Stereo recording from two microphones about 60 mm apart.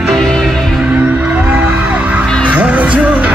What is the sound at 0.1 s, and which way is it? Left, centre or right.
Music, centre.